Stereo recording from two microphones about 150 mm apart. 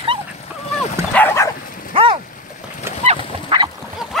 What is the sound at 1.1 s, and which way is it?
Dog, 15° left (ahead or behind).